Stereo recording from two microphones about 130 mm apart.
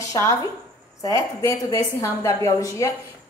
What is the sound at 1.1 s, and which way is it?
A woman's voice, 25° left (ahead or behind).